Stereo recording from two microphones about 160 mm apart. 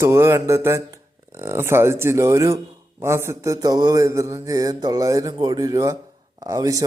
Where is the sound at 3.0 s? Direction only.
15° right (ahead or behind).